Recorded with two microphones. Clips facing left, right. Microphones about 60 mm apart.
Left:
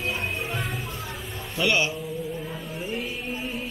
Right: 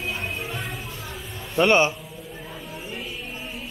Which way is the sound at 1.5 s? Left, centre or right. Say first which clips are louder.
Right 6 dB; right.